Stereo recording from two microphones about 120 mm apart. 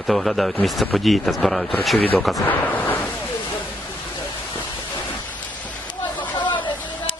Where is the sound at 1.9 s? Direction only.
15° left (ahead or behind).